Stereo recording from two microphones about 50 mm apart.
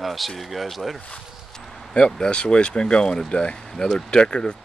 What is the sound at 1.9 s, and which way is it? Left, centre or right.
Speech, centre.